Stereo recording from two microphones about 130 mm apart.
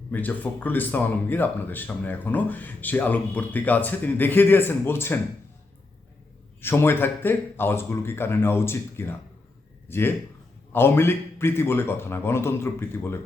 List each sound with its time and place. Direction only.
0.1 s speech: 15° left (ahead or behind)
6.6 s speech: 15° left (ahead or behind)